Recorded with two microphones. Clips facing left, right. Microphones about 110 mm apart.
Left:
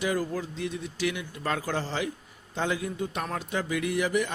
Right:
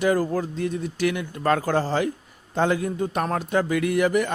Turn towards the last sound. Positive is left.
turn(degrees=-55)  # may be behind; listen again after turning